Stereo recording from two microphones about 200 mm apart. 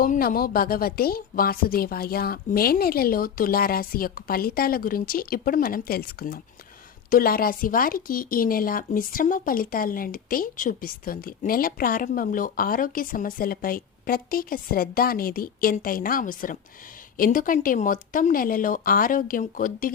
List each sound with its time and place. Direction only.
0.0 s speech: 45° left (ahead or behind)